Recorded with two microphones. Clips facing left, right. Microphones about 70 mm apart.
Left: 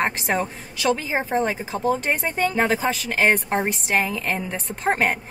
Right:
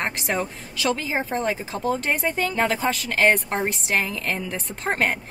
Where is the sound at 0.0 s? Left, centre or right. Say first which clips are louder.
Left 3 dB; centre.